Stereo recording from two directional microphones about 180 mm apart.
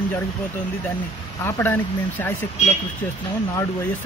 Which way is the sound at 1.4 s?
15° left (ahead or behind).